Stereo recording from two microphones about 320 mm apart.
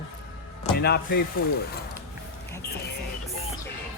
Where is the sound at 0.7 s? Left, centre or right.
Left.